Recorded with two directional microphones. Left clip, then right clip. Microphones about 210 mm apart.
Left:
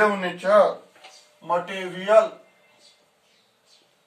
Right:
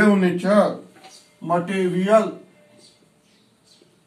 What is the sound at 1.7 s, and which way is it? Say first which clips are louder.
Speech: right 1 dB; 15° left (ahead or behind).